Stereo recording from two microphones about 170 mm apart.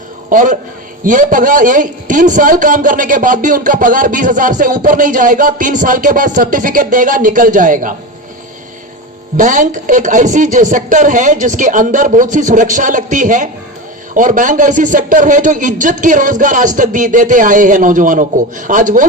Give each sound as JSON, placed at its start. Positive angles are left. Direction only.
{"t": 0.3, "sound": "a man's voice", "side_deg": -50}
{"t": 9.4, "sound": "a man's voice", "side_deg": -50}